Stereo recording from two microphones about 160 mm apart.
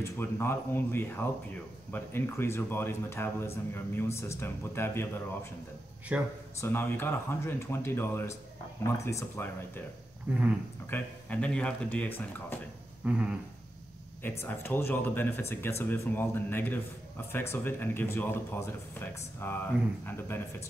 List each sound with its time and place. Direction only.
0.0 s a man's voice: 15° left (ahead or behind)
6.1 s speech: 10° right (ahead or behind)
6.6 s a man's voice: 15° left (ahead or behind)
10.9 s a man's voice: 10° left (ahead or behind)
13.0 s speech: 10° right (ahead or behind)
14.2 s a man's voice: 15° left (ahead or behind)